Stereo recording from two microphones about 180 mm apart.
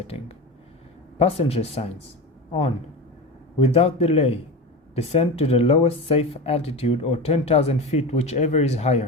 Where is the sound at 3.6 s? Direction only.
35° left (ahead or behind).